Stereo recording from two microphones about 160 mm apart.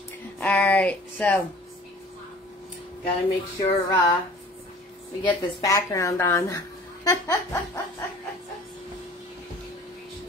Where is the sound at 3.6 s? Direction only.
25° left (ahead or behind).